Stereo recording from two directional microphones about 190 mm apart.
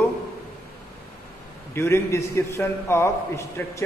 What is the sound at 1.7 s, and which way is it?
A man's voice, 15° left (ahead or behind).